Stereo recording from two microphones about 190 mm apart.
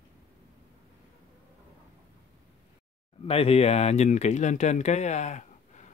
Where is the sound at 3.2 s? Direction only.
30° left (ahead or behind).